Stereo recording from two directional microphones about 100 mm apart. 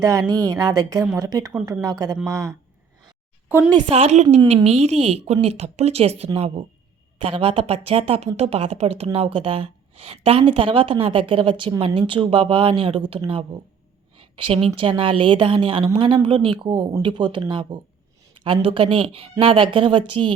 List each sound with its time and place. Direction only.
0.0 s a woman's voice: 35° right (ahead or behind)
3.8 s speech: 90° right
7.2 s a woman's voice: 65° right (ahead or behind); by 9.0 s 85° right
9.1 s a woman's voice: 65° right (ahead or behind)